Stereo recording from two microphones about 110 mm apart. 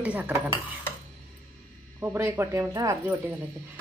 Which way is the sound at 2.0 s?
20° right (ahead or behind).